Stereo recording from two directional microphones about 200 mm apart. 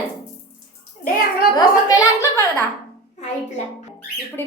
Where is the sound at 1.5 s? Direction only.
15° left (ahead or behind).